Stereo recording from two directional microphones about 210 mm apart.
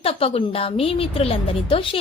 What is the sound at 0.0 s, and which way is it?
A woman's voice, 25° left (ahead or behind).